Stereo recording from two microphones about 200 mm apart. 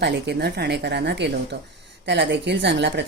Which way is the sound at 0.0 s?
55° right (ahead or behind).